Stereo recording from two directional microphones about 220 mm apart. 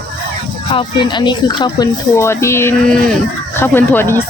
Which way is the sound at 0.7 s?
20° left (ahead or behind).